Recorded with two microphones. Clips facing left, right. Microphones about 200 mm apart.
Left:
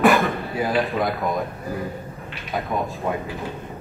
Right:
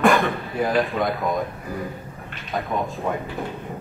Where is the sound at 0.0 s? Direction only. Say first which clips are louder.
Left 1 dB; 5° left (ahead or behind).